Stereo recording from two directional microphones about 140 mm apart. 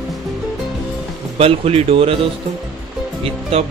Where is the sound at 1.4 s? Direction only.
45° right (ahead or behind).